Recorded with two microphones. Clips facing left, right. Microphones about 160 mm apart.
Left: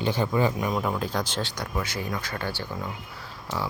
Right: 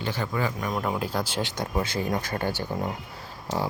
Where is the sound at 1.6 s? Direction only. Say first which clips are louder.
Right 3 dB; 30° right (ahead or behind).